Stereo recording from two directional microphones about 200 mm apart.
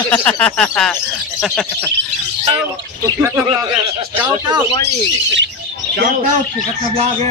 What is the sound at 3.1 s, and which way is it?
Speech, 15° right (ahead or behind).